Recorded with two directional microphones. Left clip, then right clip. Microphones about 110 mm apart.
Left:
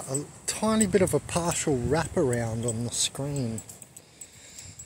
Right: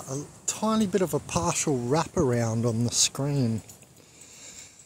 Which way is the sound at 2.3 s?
50° right (ahead or behind).